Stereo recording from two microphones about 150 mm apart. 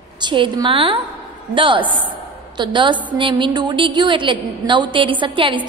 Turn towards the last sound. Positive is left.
turn(degrees=-35)  # may be behind; listen again after turning